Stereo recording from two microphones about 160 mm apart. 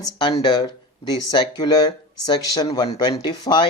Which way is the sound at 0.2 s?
30° left (ahead or behind).